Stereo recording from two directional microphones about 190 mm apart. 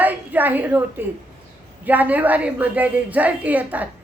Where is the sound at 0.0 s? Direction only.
10° right (ahead or behind).